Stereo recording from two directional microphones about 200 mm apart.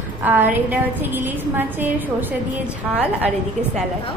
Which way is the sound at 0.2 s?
10° right (ahead or behind).